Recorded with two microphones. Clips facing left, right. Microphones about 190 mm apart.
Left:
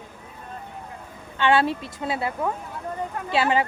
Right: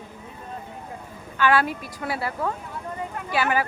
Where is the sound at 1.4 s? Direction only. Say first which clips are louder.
Left 1 dB; 25° left (ahead or behind).